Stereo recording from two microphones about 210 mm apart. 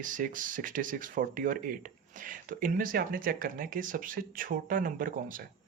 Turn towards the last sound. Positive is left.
turn(degrees=-40)  # may be behind; listen again after turning